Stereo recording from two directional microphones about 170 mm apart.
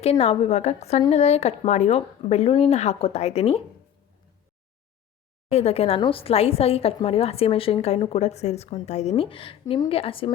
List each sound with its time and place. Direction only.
0.0 s a woman's voice: 35° left (ahead or behind)
5.5 s a woman's voice: 35° left (ahead or behind)